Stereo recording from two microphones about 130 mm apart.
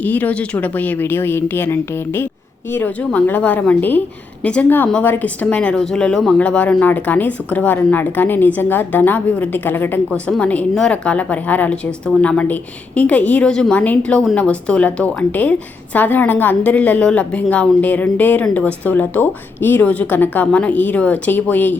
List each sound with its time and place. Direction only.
0.0 s speech: 15° left (ahead or behind)